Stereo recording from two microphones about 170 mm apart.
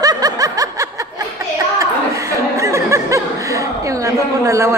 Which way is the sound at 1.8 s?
20° right (ahead or behind).